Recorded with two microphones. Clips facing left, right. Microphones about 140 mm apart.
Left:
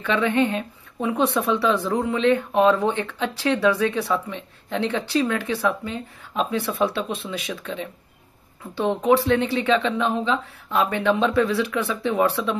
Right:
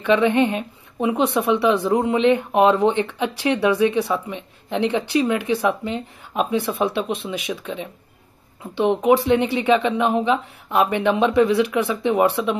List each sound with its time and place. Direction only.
0.0 s speech: 20° right (ahead or behind)